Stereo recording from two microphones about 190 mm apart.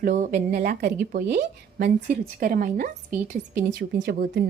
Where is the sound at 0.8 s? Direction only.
55° right (ahead or behind).